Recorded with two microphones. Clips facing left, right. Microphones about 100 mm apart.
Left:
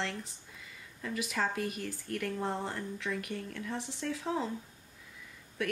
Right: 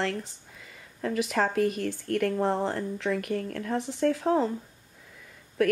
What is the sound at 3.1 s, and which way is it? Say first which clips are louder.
Speech: right 10 dB; 50° right (ahead or behind).